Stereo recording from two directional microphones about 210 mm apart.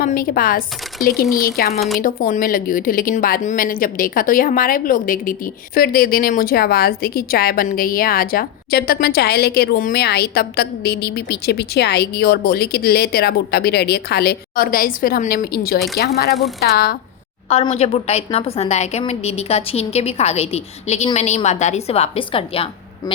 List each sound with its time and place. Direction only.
0.0 s a woman's voice: 45° left (ahead or behind)
17.5 s a woman's voice: 30° left (ahead or behind)